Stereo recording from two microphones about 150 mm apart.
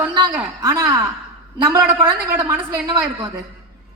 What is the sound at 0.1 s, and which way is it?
A woman's voice, 25° right (ahead or behind).